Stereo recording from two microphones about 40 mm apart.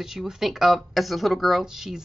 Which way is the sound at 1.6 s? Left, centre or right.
Centre.